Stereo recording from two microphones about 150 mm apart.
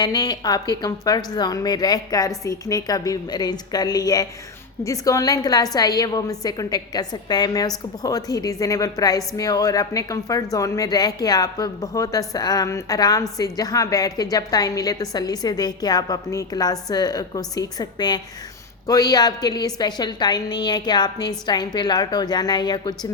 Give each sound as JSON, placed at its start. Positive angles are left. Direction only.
{"t": 0.0, "sound": "a woman's voice", "side_deg": 25}